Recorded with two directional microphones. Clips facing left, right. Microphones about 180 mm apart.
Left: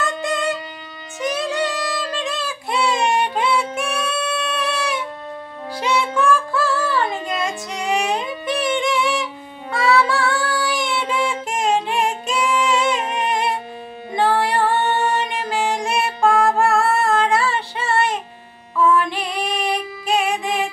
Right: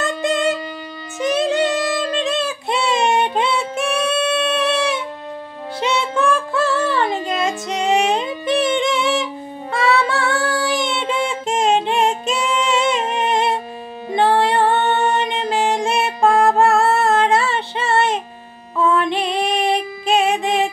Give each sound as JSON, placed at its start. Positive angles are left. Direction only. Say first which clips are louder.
{"t": 0.0, "sound": "music", "louder": "right 3 dB", "side_deg": -25}
{"t": 1.2, "sound": "child singing", "louder": "right 5 dB", "side_deg": -25}
{"t": 5.8, "sound": "music", "louder": "right 1 dB", "side_deg": -25}
{"t": 14.1, "sound": "female singing", "louder": "right 3 dB", "side_deg": -25}